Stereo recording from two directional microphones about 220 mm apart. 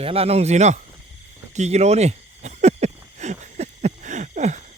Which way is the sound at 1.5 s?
30° right (ahead or behind).